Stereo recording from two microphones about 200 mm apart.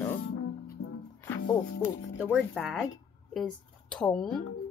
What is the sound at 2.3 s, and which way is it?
Speech, 5° left (ahead or behind).